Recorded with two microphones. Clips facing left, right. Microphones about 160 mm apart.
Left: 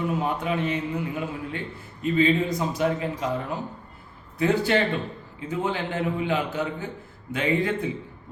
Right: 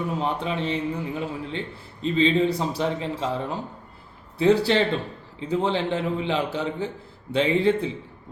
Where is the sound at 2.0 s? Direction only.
30° right (ahead or behind).